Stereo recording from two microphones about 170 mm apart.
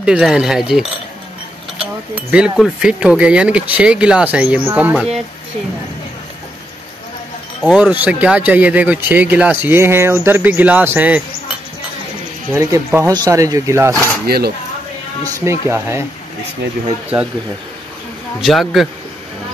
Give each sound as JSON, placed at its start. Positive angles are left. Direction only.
{"t": 0.0, "sound": "speech", "side_deg": -5}
{"t": 7.6, "sound": "speech", "side_deg": -5}
{"t": 12.5, "sound": "speech", "side_deg": -15}
{"t": 14.2, "sound": "speech", "side_deg": -65}
{"t": 15.4, "sound": "speech", "side_deg": -15}
{"t": 18.4, "sound": "speech", "side_deg": 0}